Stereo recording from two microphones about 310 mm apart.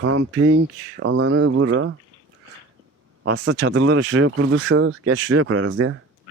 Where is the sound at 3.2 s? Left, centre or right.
Right.